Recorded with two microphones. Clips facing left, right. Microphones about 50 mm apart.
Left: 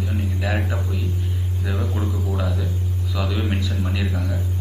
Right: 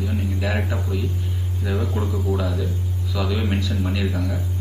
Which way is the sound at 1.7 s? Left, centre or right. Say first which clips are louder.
Right 2 dB; centre.